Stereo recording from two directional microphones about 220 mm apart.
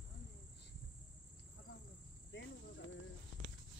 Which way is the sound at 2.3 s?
55° left (ahead or behind).